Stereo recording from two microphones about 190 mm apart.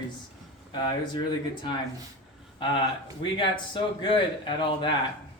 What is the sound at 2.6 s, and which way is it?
A man's voice, 25° left (ahead or behind).